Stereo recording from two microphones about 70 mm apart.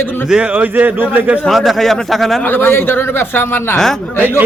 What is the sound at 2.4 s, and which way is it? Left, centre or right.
Speech, left.